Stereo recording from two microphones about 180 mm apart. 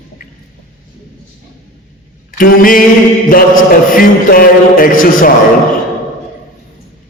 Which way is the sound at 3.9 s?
50° left (ahead or behind).